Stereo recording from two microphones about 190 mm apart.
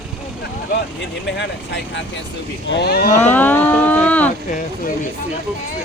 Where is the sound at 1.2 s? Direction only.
70° left (ahead or behind).